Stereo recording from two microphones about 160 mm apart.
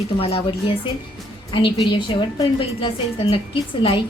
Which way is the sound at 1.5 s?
35° left (ahead or behind).